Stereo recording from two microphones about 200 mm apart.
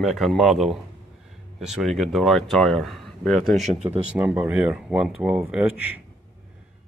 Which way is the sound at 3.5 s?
35° right (ahead or behind).